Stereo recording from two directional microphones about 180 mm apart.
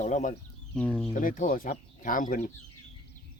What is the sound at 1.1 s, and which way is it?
Speech, 45° left (ahead or behind).